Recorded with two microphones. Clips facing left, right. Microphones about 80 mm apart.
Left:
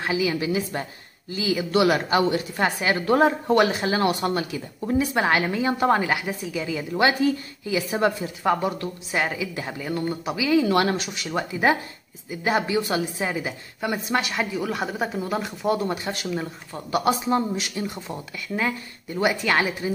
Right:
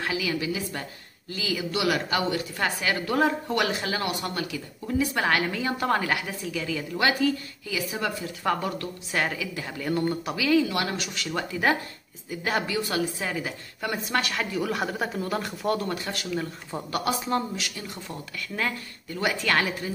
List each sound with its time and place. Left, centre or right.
0.0 s a woman's voice: left
8.5 s a woman's voice: centre
10.7 s a woman's voice: left
11.0 s a woman's voice: centre